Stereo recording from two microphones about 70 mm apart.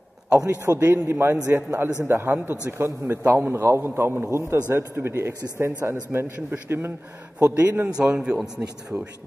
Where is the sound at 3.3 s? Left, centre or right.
Right; by 8.4 s centre.